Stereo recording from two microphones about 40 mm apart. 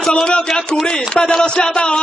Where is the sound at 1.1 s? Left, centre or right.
Left.